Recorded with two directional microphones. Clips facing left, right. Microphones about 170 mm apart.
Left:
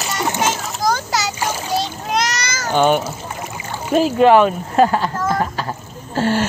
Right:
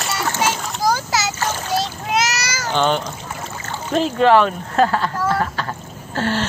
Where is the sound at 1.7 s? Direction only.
5° right (ahead or behind).